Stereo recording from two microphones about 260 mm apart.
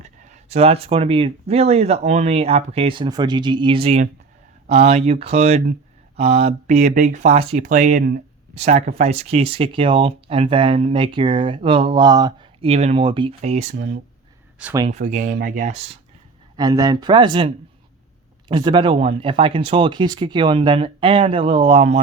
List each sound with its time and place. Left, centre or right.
0.0 s speech: right
14.6 s speech: centre
14.8 s speech: right
16.6 s speech: centre